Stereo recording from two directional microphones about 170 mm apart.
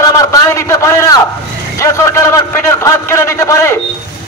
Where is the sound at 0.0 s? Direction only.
20° left (ahead or behind).